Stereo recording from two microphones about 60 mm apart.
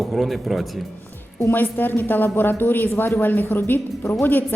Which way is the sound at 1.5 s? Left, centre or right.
Left.